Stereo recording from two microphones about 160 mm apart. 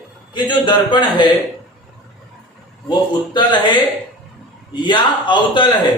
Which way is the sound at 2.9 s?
30° left (ahead or behind).